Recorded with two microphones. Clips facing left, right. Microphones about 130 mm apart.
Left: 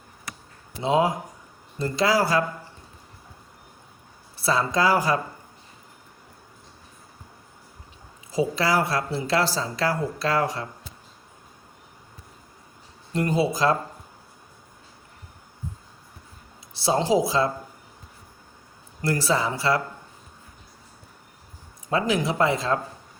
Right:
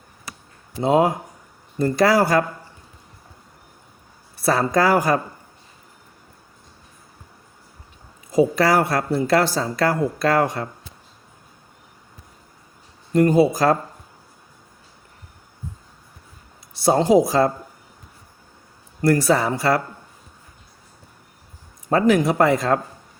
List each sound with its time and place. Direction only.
0.8 s speech: 45° right (ahead or behind)
4.4 s speech: 50° right (ahead or behind)
8.3 s speech: 50° right (ahead or behind)
13.1 s speech: 50° right (ahead or behind)
16.8 s speech: 50° right (ahead or behind)
19.0 s speech: 50° right (ahead or behind)
21.8 s speech: 50° right (ahead or behind)